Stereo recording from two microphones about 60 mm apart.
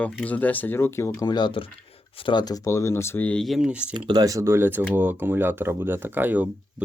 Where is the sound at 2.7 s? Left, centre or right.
Left.